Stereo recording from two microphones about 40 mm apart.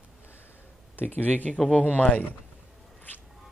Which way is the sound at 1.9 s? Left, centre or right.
Left.